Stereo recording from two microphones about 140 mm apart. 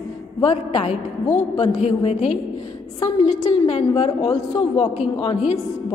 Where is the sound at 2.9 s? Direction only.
30° left (ahead or behind).